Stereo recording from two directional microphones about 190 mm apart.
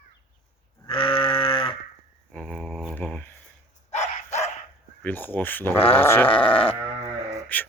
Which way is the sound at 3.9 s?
35° left (ahead or behind).